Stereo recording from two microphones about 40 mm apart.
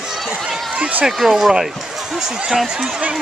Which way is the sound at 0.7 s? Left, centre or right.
Right.